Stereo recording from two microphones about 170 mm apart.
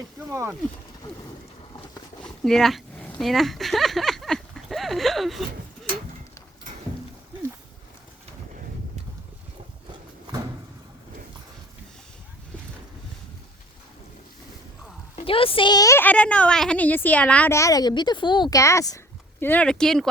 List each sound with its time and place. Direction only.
0.3 s speech: 15° right (ahead or behind)
2.2 s a sound: centre (ahead or behind)
15.1 s a woman's voice: 35° left (ahead or behind); by 20.1 s 5° left (ahead or behind)